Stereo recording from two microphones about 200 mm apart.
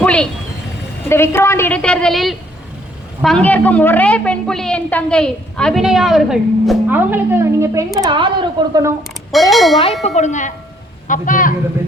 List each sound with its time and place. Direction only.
0.0 s vehicle: 5° left (ahead or behind)
1.0 s a woman's voice: 10° left (ahead or behind); by 9.0 s 15° right (ahead or behind)
9.5 s a woman's voice: centre (ahead or behind)
10.0 s speech: 35° left (ahead or behind)